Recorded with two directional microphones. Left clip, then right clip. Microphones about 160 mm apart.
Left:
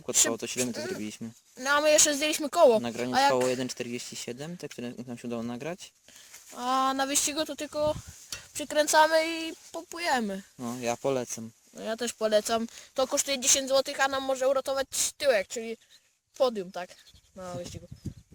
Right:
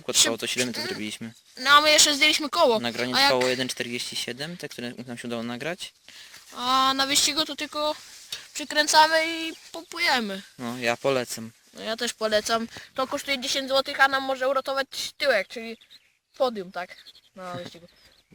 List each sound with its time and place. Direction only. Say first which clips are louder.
0.3 s speech: right 5 dB; 5° left (ahead or behind)
1.5 s speech: right 6 dB; 45° left (ahead or behind)
2.8 s speech: right 5 dB; 5° left (ahead or behind)
3.1 s speech: right 3 dB; 55° left (ahead or behind)
3.5 s speech: right 5 dB; 10° left (ahead or behind)
6.5 s speech: right 5 dB; 40° left (ahead or behind)
8.5 s speech: right 3 dB; 55° left (ahead or behind)
10.6 s speech: right 5 dB; centre (ahead or behind)
11.8 s speech: right 2 dB; 50° left (ahead or behind)